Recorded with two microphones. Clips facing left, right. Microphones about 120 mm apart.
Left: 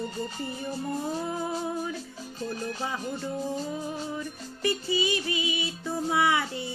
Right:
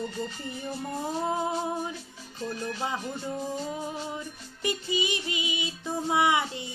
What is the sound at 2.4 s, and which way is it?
Music, 40° left (ahead or behind).